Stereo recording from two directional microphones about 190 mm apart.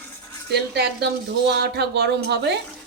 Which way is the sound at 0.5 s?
55° right (ahead or behind).